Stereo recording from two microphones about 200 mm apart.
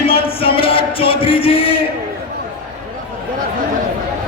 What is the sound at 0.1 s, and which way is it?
Music, 25° left (ahead or behind).